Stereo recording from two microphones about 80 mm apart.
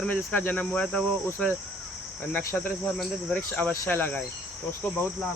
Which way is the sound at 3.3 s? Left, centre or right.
Centre.